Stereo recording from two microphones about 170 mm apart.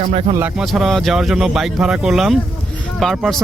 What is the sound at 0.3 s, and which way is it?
Speech, 10° right (ahead or behind).